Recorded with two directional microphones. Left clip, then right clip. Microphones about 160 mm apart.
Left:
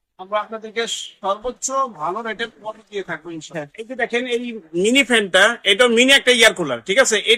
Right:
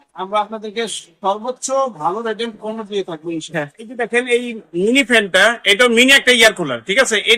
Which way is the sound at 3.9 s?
85° left.